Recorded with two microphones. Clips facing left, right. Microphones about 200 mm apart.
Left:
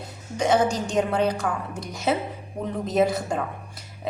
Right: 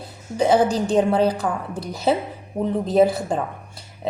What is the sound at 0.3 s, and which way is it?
Speech, 35° right (ahead or behind).